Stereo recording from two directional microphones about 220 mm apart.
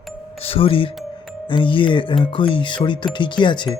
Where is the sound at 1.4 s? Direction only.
20° left (ahead or behind).